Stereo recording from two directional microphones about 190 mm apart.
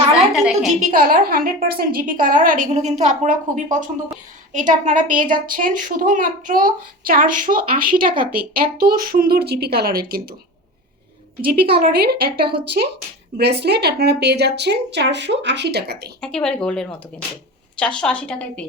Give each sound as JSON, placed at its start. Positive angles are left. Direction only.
{"t": 0.3, "sound": "a woman's voice", "side_deg": 0}
{"t": 0.8, "sound": "a woman's voice", "side_deg": -45}
{"t": 11.4, "sound": "speech", "side_deg": -55}
{"t": 16.2, "sound": "a woman's voice", "side_deg": 5}